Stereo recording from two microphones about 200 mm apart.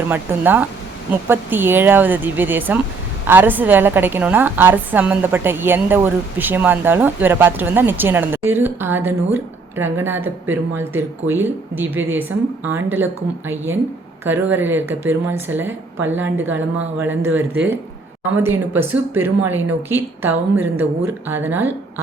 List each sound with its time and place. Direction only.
0.1 s a woman's voice: 10° right (ahead or behind)
14.3 s a woman's voice: 10° right (ahead or behind)